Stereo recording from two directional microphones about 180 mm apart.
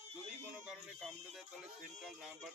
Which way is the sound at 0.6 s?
5° right (ahead or behind).